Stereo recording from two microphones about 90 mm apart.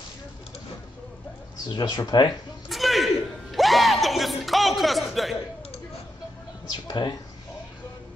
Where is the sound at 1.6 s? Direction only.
55° left (ahead or behind).